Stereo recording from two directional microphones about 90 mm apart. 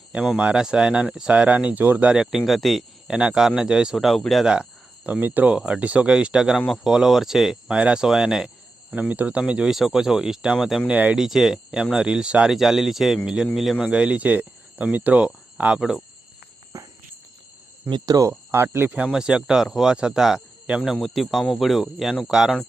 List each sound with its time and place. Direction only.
0.3 s speech: 10° right (ahead or behind)
5.0 s speech: 20° right (ahead or behind); by 10.9 s 5° right (ahead or behind)
10.9 s speech: 15° right (ahead or behind)
11.2 s speech: 5° right (ahead or behind)
16.7 s walk: 40° right (ahead or behind)
17.8 s speech: 50° right (ahead or behind); by 18.9 s 25° right (ahead or behind)
18.9 s speech: 10° right (ahead or behind)